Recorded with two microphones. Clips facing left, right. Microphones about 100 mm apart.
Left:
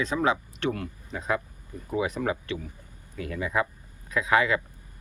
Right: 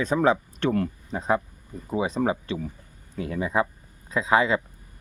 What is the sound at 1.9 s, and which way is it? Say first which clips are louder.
Speech: right 3 dB; 25° right (ahead or behind).